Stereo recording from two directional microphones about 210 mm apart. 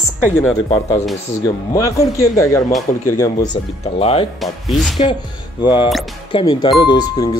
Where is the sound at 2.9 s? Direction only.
40° left (ahead or behind).